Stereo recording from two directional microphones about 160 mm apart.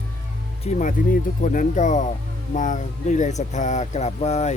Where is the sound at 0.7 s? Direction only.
50° left (ahead or behind).